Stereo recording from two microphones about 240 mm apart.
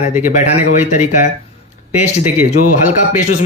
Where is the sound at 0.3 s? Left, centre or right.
Left.